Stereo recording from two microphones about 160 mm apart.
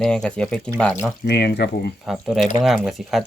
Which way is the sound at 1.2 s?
90° left.